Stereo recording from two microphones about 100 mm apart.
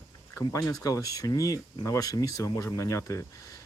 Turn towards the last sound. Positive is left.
turn(degrees=30)  # may be behind; listen again after turning